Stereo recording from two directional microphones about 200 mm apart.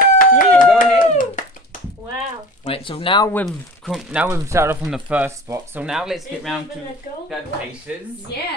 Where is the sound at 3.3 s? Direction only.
Centre (ahead or behind).